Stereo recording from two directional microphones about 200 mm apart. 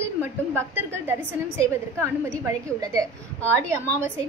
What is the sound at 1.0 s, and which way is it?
A woman's voice, 10° right (ahead or behind).